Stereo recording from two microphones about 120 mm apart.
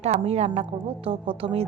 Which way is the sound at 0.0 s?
60° right (ahead or behind).